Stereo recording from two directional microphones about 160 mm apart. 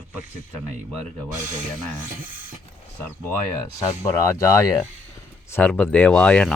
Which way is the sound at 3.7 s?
20° left (ahead or behind).